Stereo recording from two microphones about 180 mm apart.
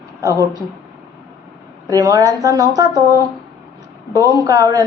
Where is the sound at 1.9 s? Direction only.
20° right (ahead or behind).